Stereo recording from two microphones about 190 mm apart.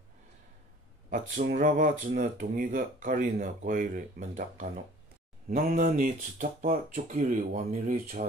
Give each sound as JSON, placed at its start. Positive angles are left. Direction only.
{"t": 1.4, "sound": "speech", "side_deg": -45}